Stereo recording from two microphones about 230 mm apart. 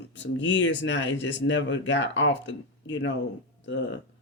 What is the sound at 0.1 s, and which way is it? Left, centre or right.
Speech, left.